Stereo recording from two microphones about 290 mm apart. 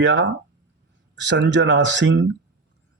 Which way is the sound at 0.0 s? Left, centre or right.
Right.